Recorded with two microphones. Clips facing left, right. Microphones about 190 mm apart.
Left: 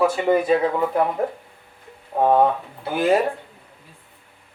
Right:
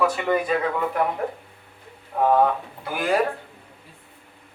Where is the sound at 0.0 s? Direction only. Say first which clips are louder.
Left 4 dB; 30° left (ahead or behind).